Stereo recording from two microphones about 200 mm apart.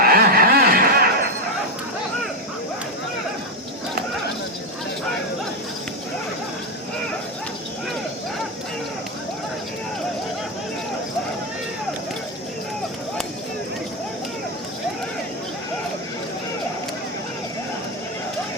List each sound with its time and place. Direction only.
0.0 s snicker: 50° right (ahead or behind)